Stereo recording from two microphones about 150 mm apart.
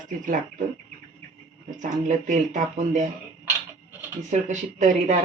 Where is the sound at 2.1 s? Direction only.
55° right (ahead or behind).